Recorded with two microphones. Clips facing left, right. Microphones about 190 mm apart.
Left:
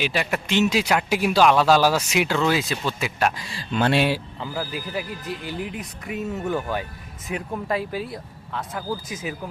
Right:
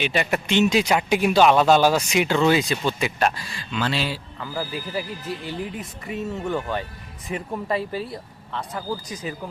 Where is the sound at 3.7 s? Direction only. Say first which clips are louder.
Left 5 dB; 55° left (ahead or behind).